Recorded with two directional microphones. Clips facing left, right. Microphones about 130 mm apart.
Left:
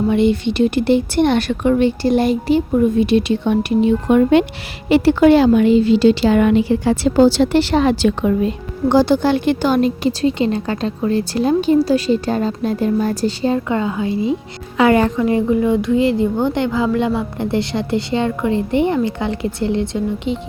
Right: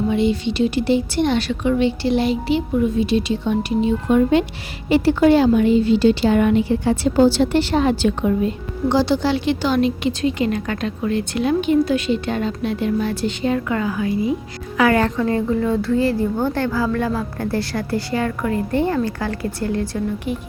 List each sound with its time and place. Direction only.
0.1 s a woman's voice: 60° left (ahead or behind); by 8.5 s 90° left
8.9 s a woman's voice: 50° left (ahead or behind); by 20.4 s 25° left (ahead or behind)